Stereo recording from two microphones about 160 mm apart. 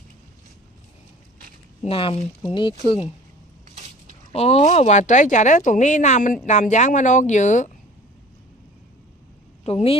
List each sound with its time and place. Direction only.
1.8 s speech: 35° left (ahead or behind)
3.8 s a sound: 50° right (ahead or behind)
4.3 s speech: 40° left (ahead or behind)
9.6 s speech: 40° left (ahead or behind)